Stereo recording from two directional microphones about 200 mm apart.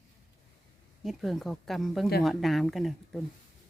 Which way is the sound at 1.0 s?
Centre (ahead or behind).